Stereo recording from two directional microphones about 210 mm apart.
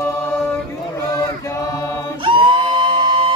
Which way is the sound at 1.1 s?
15° left (ahead or behind).